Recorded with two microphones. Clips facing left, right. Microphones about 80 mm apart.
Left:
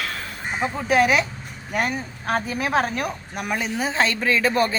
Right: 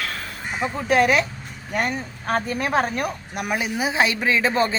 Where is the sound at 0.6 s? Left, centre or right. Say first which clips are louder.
Even; centre.